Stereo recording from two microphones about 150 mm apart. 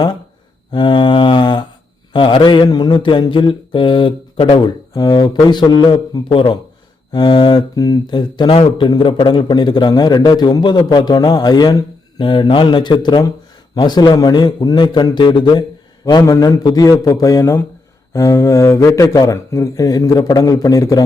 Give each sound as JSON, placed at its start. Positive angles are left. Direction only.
{"t": 0.7, "sound": "mantra", "side_deg": 30}
{"t": 7.1, "sound": "speech", "side_deg": 30}